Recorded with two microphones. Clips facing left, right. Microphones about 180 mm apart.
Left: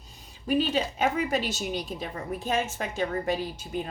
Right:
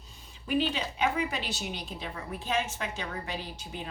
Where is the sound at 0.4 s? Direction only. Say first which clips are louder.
Left 4 dB; 45° left (ahead or behind).